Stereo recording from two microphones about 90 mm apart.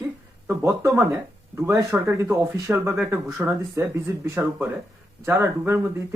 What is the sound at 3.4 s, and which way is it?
Speech, 30° right (ahead or behind).